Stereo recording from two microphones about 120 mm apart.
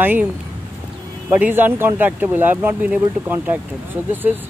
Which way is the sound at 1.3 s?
15° right (ahead or behind).